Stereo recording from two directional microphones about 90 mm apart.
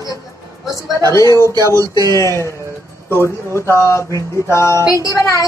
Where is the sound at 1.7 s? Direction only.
45° right (ahead or behind).